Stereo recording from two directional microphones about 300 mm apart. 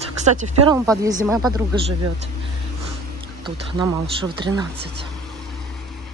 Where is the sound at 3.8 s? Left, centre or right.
Centre.